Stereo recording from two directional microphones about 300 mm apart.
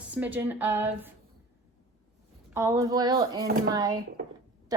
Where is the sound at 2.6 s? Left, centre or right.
Centre.